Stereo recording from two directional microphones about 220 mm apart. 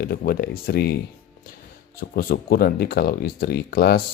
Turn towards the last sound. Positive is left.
turn(degrees=45)  # may be behind; listen again after turning